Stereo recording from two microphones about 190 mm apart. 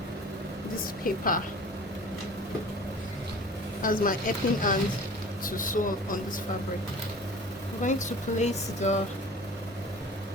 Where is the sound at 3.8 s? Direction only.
45° left (ahead or behind).